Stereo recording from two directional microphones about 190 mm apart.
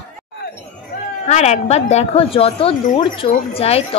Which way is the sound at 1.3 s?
35° left (ahead or behind).